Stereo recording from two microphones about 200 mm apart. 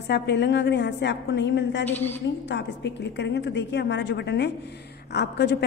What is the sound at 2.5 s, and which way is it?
A woman's voice, 60° left (ahead or behind).